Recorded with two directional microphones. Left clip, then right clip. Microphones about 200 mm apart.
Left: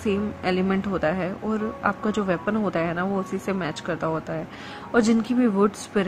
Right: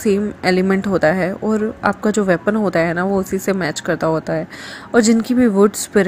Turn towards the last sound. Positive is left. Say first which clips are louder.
# right 8 dB
turn(degrees=-20)  # may be behind; listen again after turning